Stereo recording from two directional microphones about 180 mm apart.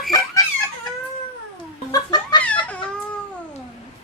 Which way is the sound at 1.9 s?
20° left (ahead or behind).